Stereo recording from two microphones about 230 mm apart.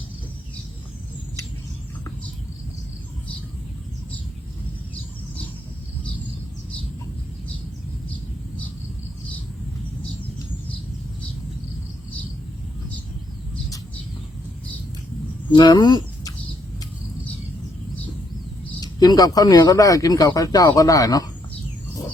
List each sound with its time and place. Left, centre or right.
15.5 s speech: centre
18.8 s speech: centre